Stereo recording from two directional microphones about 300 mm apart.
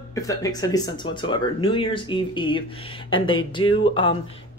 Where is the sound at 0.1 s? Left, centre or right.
Centre.